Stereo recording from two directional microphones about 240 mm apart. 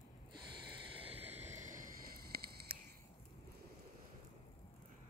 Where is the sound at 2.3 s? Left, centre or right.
Right.